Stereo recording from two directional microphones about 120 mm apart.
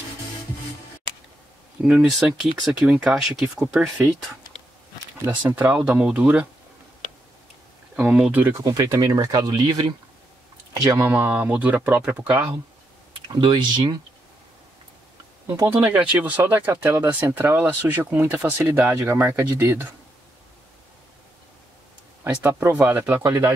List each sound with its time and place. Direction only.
1.8 s speech: 5° right (ahead or behind)
5.2 s speech: 15° right (ahead or behind)
7.9 s speech: 10° right (ahead or behind)
8.6 s speech: 30° right (ahead or behind)
11.1 s speech: 15° right (ahead or behind)
13.3 s speech: 40° right (ahead or behind)
15.4 s speech: 25° right (ahead or behind)
16.1 s speech: 10° right (ahead or behind)
22.4 s speech: 20° right (ahead or behind)